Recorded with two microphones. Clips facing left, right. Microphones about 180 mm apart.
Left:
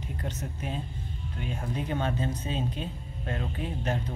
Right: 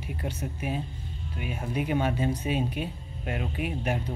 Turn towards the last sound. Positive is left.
turn(degrees=-10)  # may be behind; listen again after turning